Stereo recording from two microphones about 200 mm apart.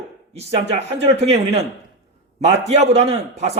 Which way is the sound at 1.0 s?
30° right (ahead or behind).